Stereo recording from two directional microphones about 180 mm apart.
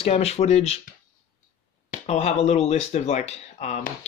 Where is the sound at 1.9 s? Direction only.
40° left (ahead or behind).